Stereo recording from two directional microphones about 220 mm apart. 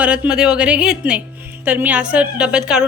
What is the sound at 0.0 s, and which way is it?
A woman's voice, 5° right (ahead or behind).